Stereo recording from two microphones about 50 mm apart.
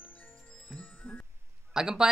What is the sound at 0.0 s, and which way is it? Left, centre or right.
Music, left.